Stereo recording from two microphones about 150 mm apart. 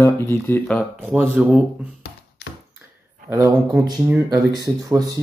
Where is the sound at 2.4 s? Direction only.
90° left.